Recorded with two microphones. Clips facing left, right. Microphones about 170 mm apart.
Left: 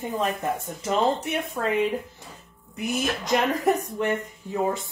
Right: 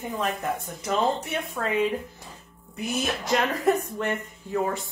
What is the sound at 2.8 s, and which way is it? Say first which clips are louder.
A woman's voice: left 1 dB; 20° left (ahead or behind).